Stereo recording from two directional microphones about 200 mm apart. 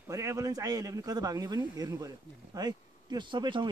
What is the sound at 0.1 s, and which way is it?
A man's voice, 15° right (ahead or behind).